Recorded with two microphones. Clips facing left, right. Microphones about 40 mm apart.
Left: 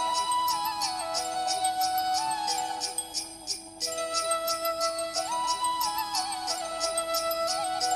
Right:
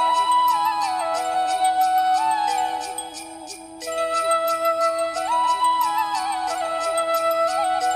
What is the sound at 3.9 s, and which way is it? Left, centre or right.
Flute, right.